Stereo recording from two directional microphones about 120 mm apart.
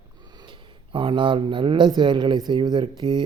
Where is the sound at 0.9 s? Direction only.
40° right (ahead or behind).